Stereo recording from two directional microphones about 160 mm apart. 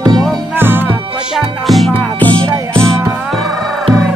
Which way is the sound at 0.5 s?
15° right (ahead or behind).